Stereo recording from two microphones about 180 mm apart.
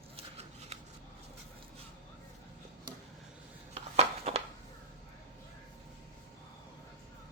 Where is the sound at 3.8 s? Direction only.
35° right (ahead or behind).